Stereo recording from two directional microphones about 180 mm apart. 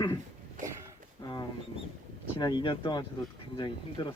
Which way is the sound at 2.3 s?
25° left (ahead or behind).